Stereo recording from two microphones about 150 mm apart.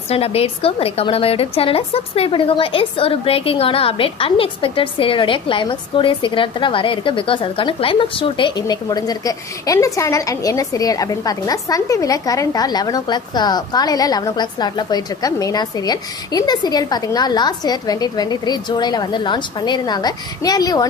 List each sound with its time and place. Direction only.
0.1 s a woman's voice: 40° left (ahead or behind); by 20.8 s 25° left (ahead or behind)